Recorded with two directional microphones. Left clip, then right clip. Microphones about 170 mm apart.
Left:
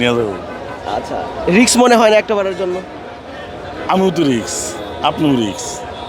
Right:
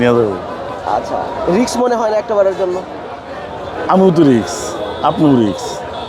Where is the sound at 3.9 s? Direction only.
30° right (ahead or behind).